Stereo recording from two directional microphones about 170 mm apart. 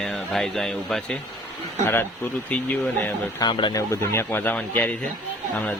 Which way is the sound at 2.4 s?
10° left (ahead or behind).